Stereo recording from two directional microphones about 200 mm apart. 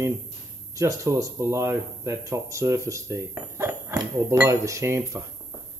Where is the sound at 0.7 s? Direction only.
15° right (ahead or behind).